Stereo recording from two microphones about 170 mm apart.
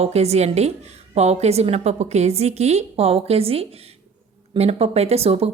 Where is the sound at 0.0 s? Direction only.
40° right (ahead or behind).